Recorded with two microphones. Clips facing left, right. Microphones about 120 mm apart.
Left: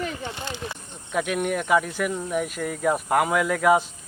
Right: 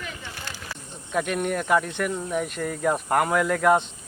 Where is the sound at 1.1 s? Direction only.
5° left (ahead or behind).